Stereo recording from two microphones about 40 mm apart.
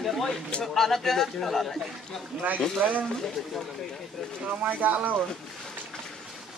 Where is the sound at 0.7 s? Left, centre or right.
Centre.